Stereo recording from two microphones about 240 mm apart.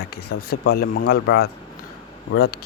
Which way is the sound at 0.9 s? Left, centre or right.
Left.